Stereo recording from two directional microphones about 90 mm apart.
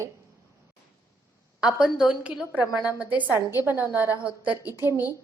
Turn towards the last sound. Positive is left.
turn(degrees=-25)  # may be behind; listen again after turning